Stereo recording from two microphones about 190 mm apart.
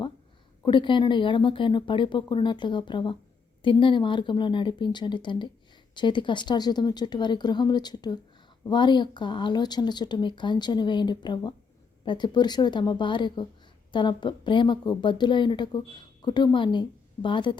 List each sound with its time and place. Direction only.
0.6 s speech: 25° left (ahead or behind)